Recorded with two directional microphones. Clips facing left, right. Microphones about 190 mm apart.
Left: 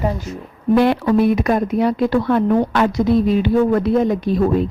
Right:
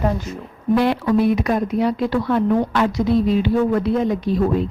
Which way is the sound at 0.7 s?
55° left (ahead or behind).